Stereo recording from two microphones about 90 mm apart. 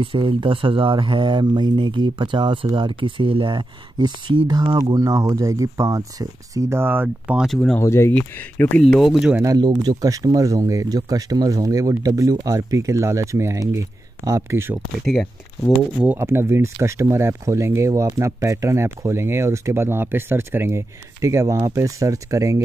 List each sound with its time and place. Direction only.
0.0 s speech: 75° right (ahead or behind); by 4.7 s 55° right (ahead or behind)
4.9 s speech: 40° right (ahead or behind)
6.8 s speech: 25° right (ahead or behind)
7.4 s speech: 5° left (ahead or behind)
7.8 s speech: 30° left (ahead or behind)
8.1 s speech: 20° left (ahead or behind)
9.6 s speech: 50° right (ahead or behind); by 14.8 s 30° right (ahead or behind)
15.0 s speech: 5° left (ahead or behind)
16.2 s speech: 25° right (ahead or behind)